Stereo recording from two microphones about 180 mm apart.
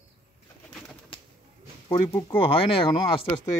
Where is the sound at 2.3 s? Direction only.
30° left (ahead or behind).